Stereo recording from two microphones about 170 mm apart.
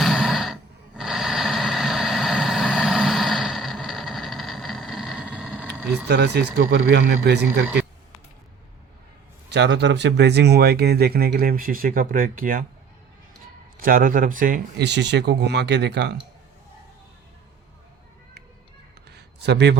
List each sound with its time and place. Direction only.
0.0 s sigh: centre (ahead or behind)
0.9 s vehicle: centre (ahead or behind)
6.1 s speech: 80° right
9.5 s speech: 85° right; by 12.6 s 55° right (ahead or behind)
13.7 s speech: 55° right (ahead or behind)
14.8 s speech: 90° right
19.1 s a sound: 85° right